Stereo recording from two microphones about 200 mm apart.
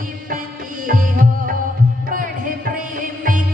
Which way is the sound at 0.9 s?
45° right (ahead or behind).